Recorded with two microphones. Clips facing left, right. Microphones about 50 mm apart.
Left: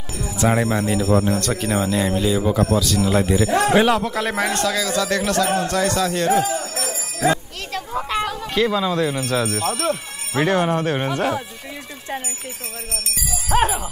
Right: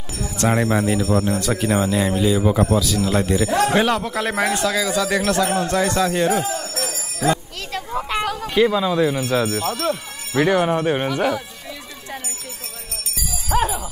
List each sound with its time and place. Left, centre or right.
0.4 s speech: centre
2.4 s a man's voice: centre
3.0 s a man's voice: centre
6.3 s speech: centre
6.8 s music: centre
7.7 s a sound: centre
8.5 s a man's voice: centre
9.6 s speech: left
10.4 s a man's voice: centre
12.9 s music: left